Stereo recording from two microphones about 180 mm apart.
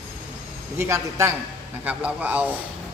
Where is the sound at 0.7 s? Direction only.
15° right (ahead or behind).